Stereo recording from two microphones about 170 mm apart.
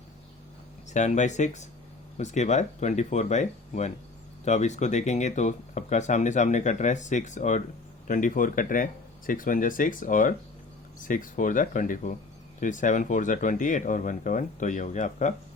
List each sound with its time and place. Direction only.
0.9 s speech: 45° left (ahead or behind)